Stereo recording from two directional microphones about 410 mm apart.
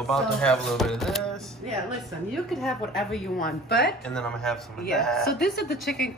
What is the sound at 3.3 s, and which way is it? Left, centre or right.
Speech, left.